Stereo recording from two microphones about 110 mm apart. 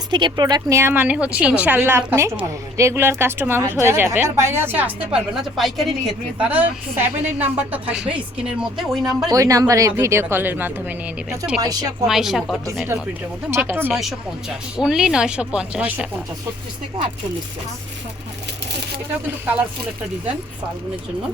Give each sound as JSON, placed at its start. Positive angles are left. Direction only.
{"t": 0.1, "sound": "speech", "side_deg": -45}
{"t": 0.7, "sound": "speech", "side_deg": -25}
{"t": 6.4, "sound": "speech", "side_deg": -15}
{"t": 9.3, "sound": "speech", "side_deg": -30}
{"t": 11.3, "sound": "a woman's voice", "side_deg": -5}
{"t": 11.6, "sound": "speech", "side_deg": -35}
{"t": 12.0, "sound": "a woman's voice", "side_deg": -5}
{"t": 13.6, "sound": "speech", "side_deg": -20}
{"t": 14.8, "sound": "speech", "side_deg": -5}